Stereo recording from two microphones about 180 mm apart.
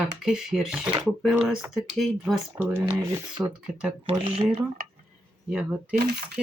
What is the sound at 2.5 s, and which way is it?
Speech, 10° right (ahead or behind).